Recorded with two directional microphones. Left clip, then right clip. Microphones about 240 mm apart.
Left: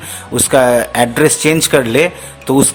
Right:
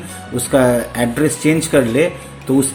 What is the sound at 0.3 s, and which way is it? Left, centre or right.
A man's voice, left.